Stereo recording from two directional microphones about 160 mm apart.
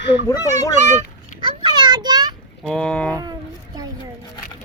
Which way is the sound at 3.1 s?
25° right (ahead or behind).